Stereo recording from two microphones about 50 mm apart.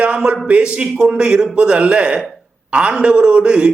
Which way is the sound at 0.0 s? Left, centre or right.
Right.